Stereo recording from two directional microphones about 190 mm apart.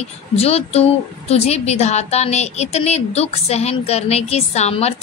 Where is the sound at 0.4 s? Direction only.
30° left (ahead or behind).